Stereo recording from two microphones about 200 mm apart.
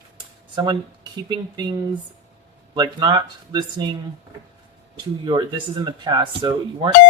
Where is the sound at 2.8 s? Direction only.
20° right (ahead or behind).